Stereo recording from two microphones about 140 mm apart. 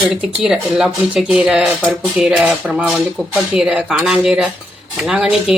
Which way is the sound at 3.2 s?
5° left (ahead or behind).